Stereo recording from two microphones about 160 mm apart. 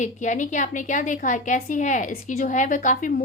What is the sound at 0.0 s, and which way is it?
A woman's voice, 50° left (ahead or behind).